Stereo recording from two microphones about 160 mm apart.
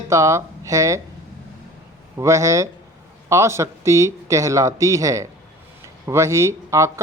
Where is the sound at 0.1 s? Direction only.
20° right (ahead or behind).